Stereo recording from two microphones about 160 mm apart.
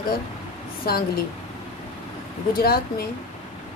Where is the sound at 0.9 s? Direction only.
75° left (ahead or behind).